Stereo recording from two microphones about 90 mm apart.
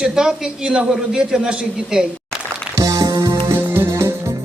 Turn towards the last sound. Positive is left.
turn(degrees=-30)  # may be behind; listen again after turning